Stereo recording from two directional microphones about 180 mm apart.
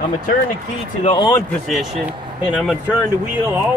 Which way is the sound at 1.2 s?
20° left (ahead or behind).